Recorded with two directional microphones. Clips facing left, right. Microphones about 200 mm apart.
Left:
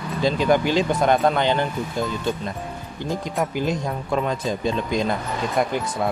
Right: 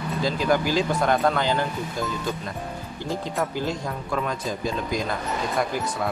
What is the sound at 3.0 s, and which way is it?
Speech, 15° left (ahead or behind).